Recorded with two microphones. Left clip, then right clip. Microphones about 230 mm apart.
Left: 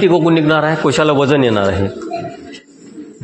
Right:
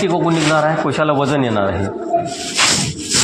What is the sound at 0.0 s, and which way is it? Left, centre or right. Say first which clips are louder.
A man's voice: left 4 dB; left.